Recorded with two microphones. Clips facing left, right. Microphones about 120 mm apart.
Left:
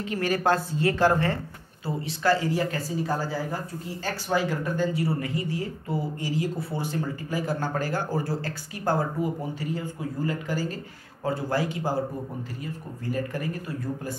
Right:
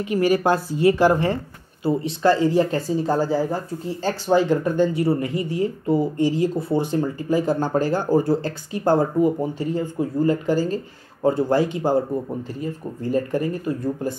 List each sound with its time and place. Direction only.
0.0 s a woman's voice: 10° right (ahead or behind)
13.1 s speech: 30° right (ahead or behind)